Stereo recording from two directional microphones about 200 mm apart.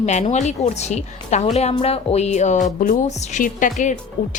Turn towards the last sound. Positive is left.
turn(degrees=40)  # may be behind; listen again after turning